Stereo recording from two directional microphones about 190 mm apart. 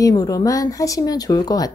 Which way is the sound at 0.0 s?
20° left (ahead or behind).